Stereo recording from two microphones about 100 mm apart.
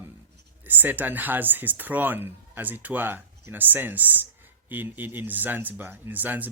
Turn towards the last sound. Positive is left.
turn(degrees=-20)  # may be behind; listen again after turning